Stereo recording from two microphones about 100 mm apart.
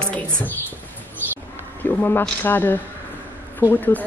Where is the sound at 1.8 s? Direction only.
20° left (ahead or behind).